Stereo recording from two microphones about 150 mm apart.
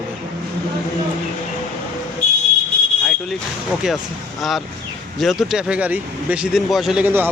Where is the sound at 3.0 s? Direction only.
Centre (ahead or behind).